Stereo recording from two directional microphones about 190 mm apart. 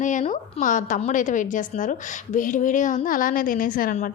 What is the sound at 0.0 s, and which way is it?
A woman's voice, 40° left (ahead or behind).